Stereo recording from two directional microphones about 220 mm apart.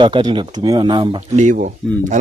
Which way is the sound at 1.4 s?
35° right (ahead or behind).